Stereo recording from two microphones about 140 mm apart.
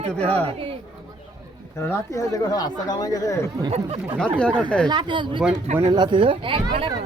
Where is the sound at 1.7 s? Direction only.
20° left (ahead or behind).